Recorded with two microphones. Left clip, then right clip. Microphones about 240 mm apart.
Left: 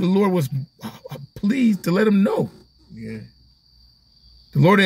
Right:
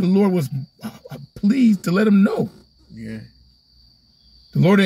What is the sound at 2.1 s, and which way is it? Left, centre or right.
Speech, left.